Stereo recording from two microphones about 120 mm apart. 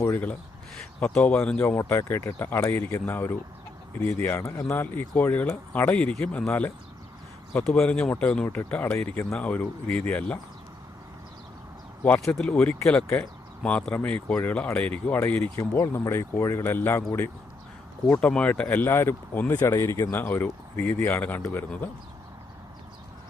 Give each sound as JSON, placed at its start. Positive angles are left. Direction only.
{"t": 0.0, "sound": "a sound", "side_deg": 15}
{"t": 0.9, "sound": "speech", "side_deg": 10}
{"t": 1.6, "sound": "speech", "side_deg": 20}
{"t": 12.2, "sound": "speech", "side_deg": 5}
{"t": 18.1, "sound": "speech", "side_deg": 10}